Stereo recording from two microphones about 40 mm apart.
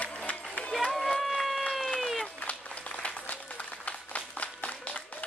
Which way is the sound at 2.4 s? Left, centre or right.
Left.